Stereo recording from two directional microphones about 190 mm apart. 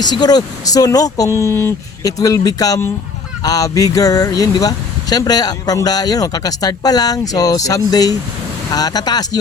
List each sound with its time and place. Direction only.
0.0 s speech: 20° left (ahead or behind)